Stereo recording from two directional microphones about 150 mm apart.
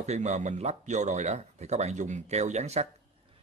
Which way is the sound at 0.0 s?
50° right (ahead or behind).